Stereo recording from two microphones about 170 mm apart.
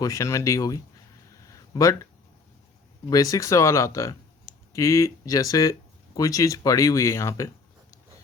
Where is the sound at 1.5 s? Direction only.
20° left (ahead or behind).